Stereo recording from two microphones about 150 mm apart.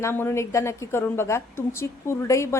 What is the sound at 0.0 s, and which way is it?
A woman's voice, 15° left (ahead or behind).